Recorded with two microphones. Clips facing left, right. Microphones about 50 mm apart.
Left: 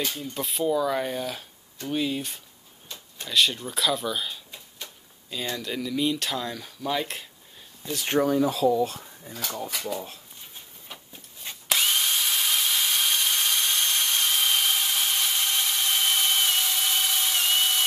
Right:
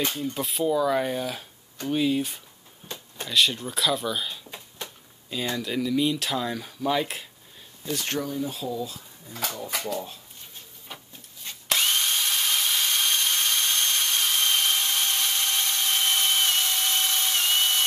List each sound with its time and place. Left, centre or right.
0.2 s speech: centre
4.5 s a sound: right
5.3 s speech: centre
8.3 s speech: left
10.9 s rub: centre
11.7 s drill: centre